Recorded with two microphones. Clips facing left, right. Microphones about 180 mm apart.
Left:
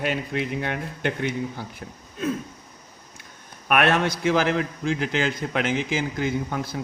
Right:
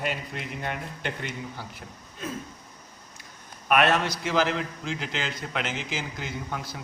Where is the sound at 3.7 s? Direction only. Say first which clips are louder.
Left 2 dB; 55° left (ahead or behind).